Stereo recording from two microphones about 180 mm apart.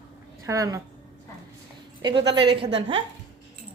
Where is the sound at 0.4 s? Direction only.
20° right (ahead or behind).